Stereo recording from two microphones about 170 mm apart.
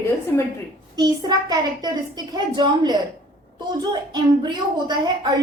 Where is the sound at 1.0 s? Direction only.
25° right (ahead or behind).